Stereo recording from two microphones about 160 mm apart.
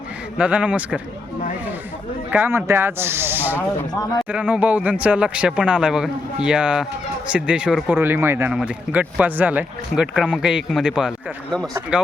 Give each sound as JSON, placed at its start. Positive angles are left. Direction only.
{"t": 0.3, "sound": "speech", "side_deg": -10}
{"t": 2.3, "sound": "speech", "side_deg": -15}
{"t": 3.6, "sound": "speech", "side_deg": 20}
{"t": 4.3, "sound": "speech", "side_deg": -10}